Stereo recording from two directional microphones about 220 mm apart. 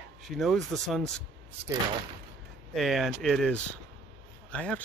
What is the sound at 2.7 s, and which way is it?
Speech, centre (ahead or behind).